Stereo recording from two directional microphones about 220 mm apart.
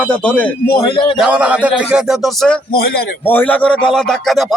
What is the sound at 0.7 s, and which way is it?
Speech, 25° left (ahead or behind).